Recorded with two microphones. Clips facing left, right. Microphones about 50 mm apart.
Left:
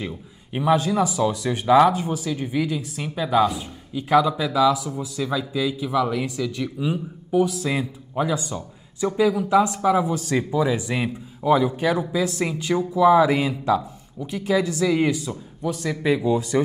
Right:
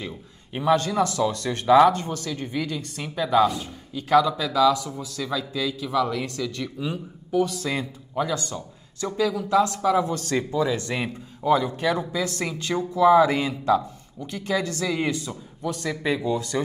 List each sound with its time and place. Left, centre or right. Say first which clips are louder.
0.0 s speech: left 3 dB; centre